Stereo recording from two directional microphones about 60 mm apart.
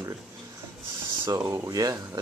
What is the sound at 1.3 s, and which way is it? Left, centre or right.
Speech, right.